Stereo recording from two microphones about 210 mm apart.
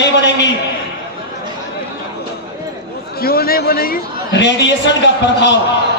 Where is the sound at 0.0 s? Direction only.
55° left (ahead or behind).